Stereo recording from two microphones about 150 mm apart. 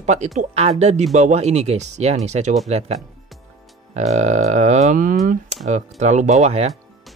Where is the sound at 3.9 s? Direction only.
50° right (ahead or behind).